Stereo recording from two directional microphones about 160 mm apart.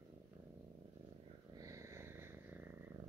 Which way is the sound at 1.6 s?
20° right (ahead or behind).